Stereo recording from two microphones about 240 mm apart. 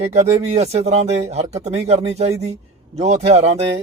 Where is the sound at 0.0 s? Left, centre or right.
Right.